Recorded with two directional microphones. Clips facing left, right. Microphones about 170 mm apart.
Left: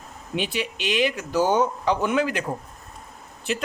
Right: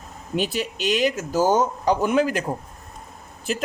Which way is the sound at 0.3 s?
40° right (ahead or behind).